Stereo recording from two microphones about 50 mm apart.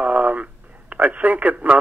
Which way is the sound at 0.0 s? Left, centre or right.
Right.